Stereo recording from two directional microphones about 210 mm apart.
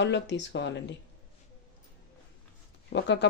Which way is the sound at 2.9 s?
55° left (ahead or behind).